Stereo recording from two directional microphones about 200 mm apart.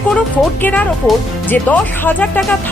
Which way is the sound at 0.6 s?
5° left (ahead or behind).